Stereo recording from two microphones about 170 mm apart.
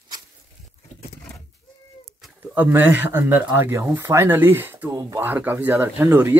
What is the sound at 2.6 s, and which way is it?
Speech, 15° right (ahead or behind).